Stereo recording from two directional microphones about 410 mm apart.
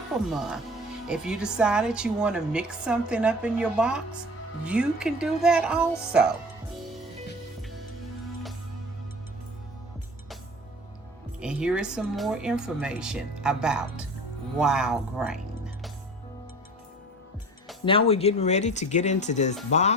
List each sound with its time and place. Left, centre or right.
0.3 s a woman's voice: centre
11.3 s a woman's voice: centre
17.8 s speech: centre